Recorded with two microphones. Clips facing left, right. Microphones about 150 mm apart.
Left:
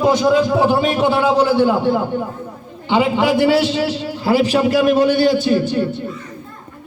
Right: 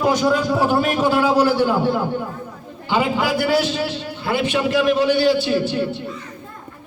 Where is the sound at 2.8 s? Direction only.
25° left (ahead or behind); by 5.8 s 45° left (ahead or behind).